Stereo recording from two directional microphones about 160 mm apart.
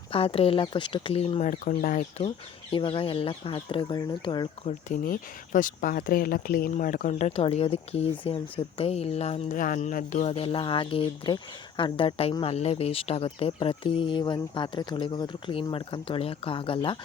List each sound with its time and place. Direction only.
0.1 s speech: 35° left (ahead or behind); by 2.2 s 55° left (ahead or behind)
2.7 s speech: 35° left (ahead or behind)
4.6 s speech: 55° left (ahead or behind); by 17.0 s 30° left (ahead or behind)